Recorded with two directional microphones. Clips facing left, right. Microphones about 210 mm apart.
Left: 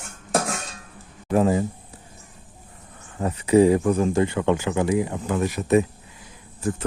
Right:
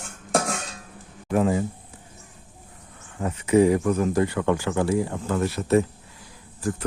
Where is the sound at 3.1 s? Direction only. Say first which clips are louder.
Left 2 dB; 35° left (ahead or behind).